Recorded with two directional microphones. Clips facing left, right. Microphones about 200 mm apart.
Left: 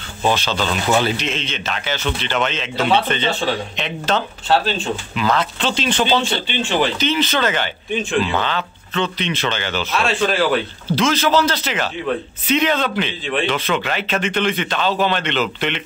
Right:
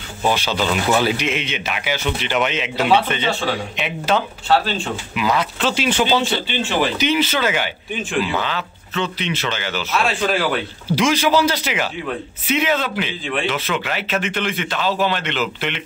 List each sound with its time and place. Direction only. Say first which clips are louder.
0.2 s speech: even; 10° right (ahead or behind)